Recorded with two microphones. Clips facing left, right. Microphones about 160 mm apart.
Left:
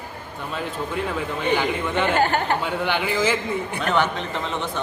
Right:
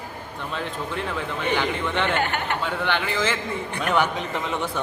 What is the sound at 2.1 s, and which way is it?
Speech, 35° left (ahead or behind).